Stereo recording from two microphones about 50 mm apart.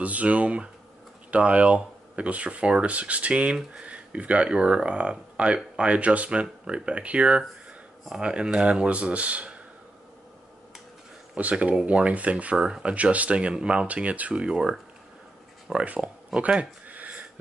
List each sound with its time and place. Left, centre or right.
0.0 s speech: right
11.3 s speech: right
12.5 s speech: centre
12.9 s speech: right
14.3 s speech: centre
15.8 s speech: right
16.3 s a sound: right